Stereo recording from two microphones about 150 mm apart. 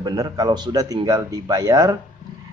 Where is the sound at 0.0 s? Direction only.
25° right (ahead or behind).